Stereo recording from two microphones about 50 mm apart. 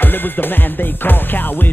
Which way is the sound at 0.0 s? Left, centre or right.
Left.